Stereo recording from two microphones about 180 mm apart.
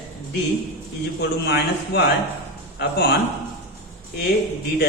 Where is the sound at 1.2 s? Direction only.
70° left (ahead or behind).